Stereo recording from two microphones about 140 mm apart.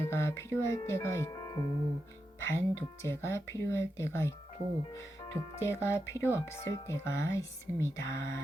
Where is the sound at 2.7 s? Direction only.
20° left (ahead or behind).